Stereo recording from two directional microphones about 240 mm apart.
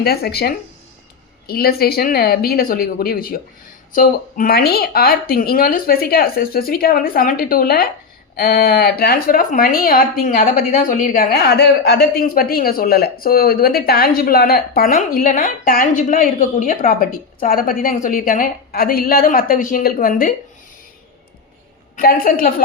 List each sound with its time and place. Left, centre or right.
0.0 s a woman's voice: left
21.9 s a woman's voice: left